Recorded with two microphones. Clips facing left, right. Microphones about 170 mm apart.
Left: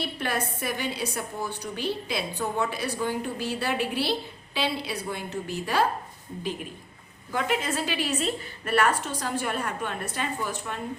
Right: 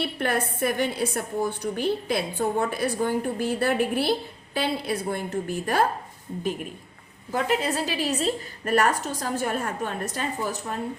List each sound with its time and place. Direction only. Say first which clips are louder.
0.0 s a woman's voice: right 4 dB; 55° right (ahead or behind)
7.3 s a woman's voice: right 3 dB; 40° right (ahead or behind)